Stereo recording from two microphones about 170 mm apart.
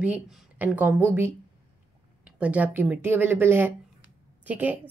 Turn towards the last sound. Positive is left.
turn(degrees=-10)  # may be behind; listen again after turning